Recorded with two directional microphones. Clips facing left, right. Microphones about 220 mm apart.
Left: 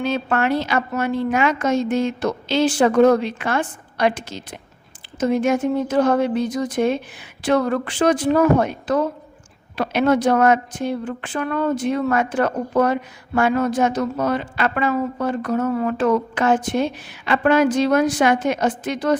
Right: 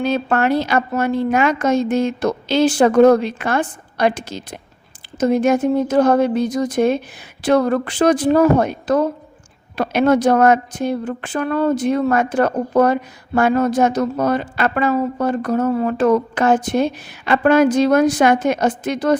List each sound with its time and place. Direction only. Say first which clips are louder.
0.0 s a woman's voice: right 3 dB; 40° right (ahead or behind)